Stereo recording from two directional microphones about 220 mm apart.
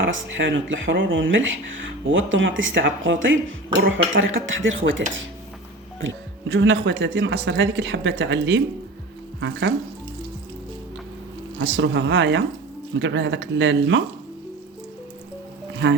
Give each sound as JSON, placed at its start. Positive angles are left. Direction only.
{"t": 0.0, "sound": "speech", "side_deg": -60}
{"t": 11.6, "sound": "speech", "side_deg": -55}
{"t": 15.8, "sound": "speech", "side_deg": -55}